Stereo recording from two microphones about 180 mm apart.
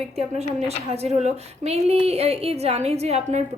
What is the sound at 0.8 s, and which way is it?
A woman's voice, 35° right (ahead or behind).